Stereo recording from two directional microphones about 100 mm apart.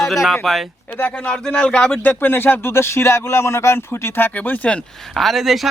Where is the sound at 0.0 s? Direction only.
Centre (ahead or behind).